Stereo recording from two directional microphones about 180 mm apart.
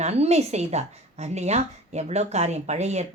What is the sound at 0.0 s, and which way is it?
A woman's voice, 35° right (ahead or behind).